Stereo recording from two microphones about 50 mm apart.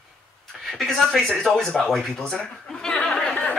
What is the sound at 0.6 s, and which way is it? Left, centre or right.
Speech, centre.